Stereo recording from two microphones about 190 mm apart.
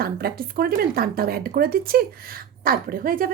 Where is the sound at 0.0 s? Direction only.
50° right (ahead or behind).